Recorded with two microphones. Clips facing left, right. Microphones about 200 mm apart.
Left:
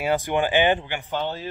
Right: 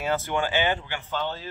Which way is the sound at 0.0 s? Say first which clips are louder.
Left 4 dB; 15° left (ahead or behind).